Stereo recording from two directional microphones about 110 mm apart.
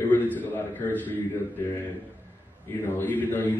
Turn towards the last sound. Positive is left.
turn(degrees=15)  # may be behind; listen again after turning